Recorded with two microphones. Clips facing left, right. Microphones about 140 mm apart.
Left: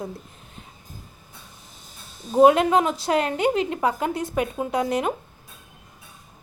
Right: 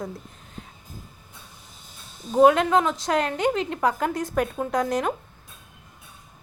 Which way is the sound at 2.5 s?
10° left (ahead or behind).